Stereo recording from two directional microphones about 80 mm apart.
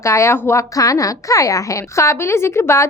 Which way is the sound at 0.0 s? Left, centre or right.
Left.